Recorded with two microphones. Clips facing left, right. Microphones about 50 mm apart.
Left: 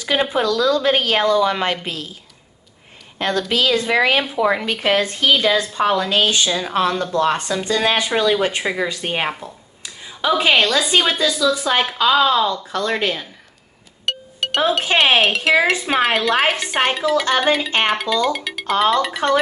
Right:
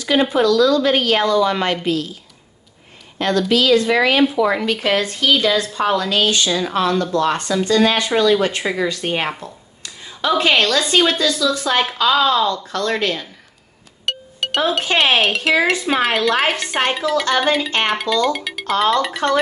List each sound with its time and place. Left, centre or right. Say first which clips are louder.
0.3 s a woman's voice: right 4 dB; left
3.2 s a woman's voice: right 3 dB; left
14.0 s music: even; centre
15.0 s speech: left 1 dB; centre